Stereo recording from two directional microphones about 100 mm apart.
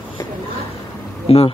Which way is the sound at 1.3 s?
75° left (ahead or behind).